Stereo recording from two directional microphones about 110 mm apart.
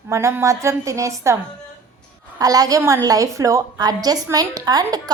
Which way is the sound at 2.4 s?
35° right (ahead or behind).